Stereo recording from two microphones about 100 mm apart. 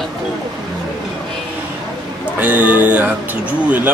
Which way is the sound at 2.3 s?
15° right (ahead or behind).